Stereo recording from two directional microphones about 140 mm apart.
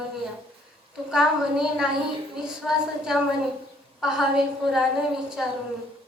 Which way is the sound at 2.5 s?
5° right (ahead or behind).